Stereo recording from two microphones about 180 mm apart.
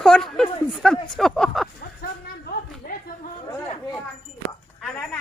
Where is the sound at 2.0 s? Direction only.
55° left (ahead or behind).